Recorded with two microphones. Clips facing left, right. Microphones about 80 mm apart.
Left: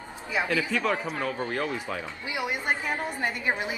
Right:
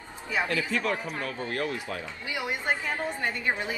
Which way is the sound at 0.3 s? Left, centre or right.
Centre.